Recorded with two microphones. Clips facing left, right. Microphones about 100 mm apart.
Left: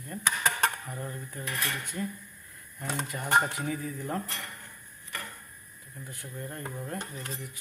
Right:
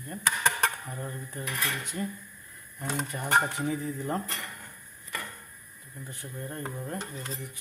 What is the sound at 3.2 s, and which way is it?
Speech, 20° right (ahead or behind).